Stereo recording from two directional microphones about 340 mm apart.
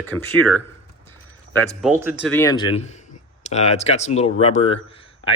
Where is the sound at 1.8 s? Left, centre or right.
Centre.